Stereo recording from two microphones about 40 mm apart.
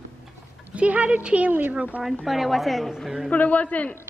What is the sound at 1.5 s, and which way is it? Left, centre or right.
Speech, right.